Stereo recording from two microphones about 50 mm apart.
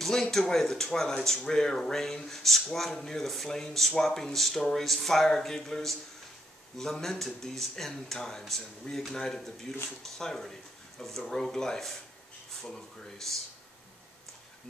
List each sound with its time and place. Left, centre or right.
0.0 s speech: centre